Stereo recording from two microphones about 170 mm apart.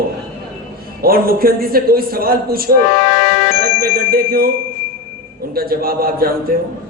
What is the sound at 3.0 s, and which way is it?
Music, 75° left (ahead or behind).